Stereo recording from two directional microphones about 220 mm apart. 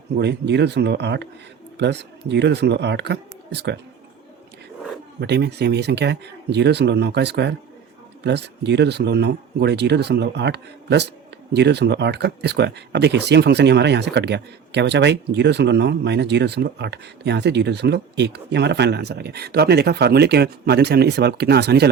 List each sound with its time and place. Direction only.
0.2 s speech: 50° right (ahead or behind)
5.2 s speech: 50° right (ahead or behind)